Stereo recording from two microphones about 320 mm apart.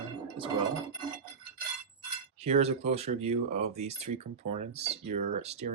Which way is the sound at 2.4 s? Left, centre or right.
Centre.